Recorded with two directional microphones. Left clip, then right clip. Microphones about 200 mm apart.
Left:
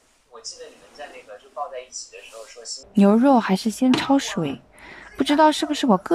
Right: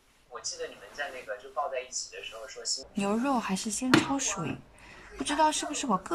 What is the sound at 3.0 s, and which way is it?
Speech, 40° left (ahead or behind).